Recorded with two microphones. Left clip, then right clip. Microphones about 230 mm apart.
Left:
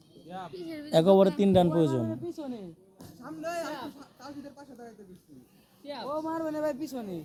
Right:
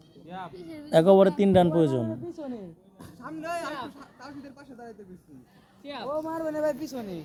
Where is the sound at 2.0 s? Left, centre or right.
Left.